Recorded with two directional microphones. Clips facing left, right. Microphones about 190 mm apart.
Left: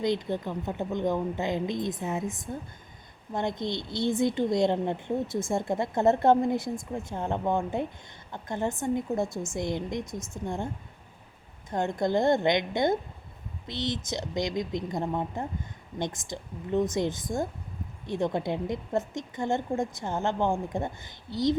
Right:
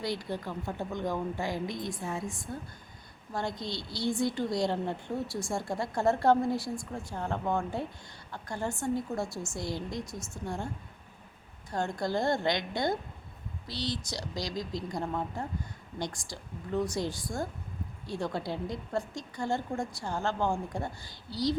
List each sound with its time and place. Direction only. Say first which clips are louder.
0.0 s a woman's voice: left 6 dB; 20° left (ahead or behind)
11.7 s a woman's voice: left 5 dB; 20° left (ahead or behind)